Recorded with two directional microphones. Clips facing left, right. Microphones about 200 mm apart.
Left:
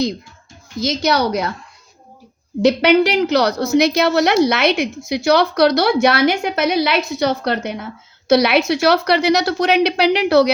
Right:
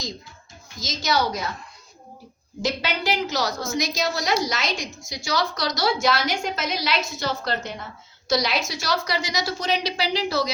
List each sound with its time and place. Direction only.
0.8 s a woman's voice: 60° left (ahead or behind)
2.6 s a woman's voice: 65° left (ahead or behind)